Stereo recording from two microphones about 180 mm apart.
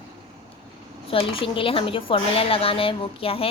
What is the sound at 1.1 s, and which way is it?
A woman's voice, 30° left (ahead or behind).